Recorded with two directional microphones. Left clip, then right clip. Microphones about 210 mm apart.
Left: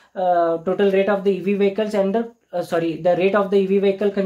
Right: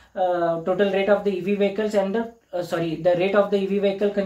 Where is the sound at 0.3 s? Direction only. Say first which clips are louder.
Left 7 dB; 45° left (ahead or behind).